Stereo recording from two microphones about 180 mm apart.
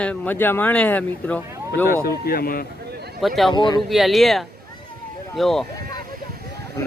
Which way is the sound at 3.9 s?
Centre (ahead or behind).